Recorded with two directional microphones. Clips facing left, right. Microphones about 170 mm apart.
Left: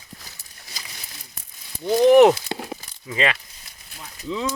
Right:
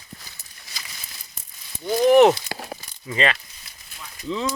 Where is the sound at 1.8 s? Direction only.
20° left (ahead or behind).